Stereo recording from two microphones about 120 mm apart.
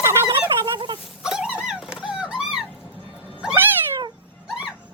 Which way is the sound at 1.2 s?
5° right (ahead or behind).